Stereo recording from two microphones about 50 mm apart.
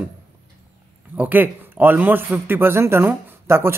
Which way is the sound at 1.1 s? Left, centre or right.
Right.